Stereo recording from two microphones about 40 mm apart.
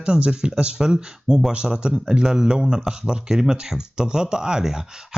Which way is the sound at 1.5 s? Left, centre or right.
Right.